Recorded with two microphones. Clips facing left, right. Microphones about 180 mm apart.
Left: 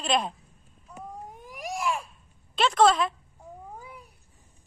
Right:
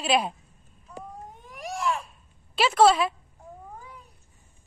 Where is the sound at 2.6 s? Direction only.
5° right (ahead or behind).